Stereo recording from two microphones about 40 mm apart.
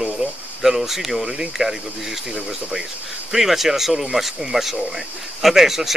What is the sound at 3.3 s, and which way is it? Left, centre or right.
Speech, centre.